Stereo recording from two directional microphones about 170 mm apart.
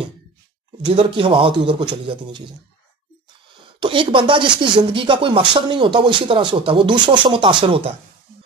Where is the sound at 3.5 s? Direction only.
30° right (ahead or behind).